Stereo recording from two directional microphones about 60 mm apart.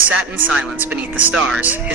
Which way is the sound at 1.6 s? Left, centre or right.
Right.